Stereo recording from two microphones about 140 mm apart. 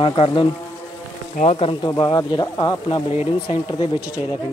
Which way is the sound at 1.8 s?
30° left (ahead or behind).